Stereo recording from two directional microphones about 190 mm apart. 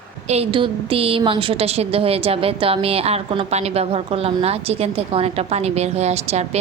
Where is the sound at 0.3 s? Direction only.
30° right (ahead or behind).